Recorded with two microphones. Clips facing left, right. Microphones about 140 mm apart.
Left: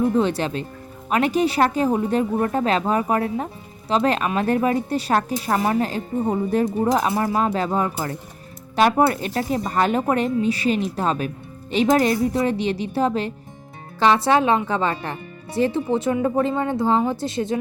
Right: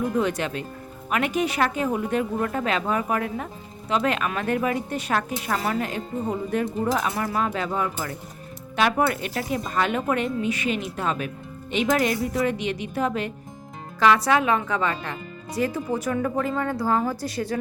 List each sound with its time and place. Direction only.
0.0 s a woman's voice: 30° left (ahead or behind)